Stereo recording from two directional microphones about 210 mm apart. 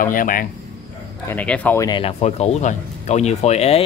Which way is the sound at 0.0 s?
40° left (ahead or behind).